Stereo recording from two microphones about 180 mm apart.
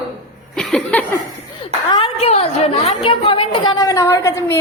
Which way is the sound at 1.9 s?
30° left (ahead or behind).